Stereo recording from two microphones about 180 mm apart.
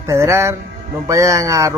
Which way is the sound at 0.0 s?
15° right (ahead or behind).